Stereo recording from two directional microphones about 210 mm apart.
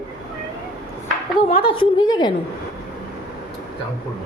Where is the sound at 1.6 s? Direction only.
25° left (ahead or behind).